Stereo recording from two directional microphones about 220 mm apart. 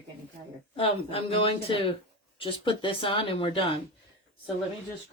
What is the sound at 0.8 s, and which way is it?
Speech, 25° left (ahead or behind).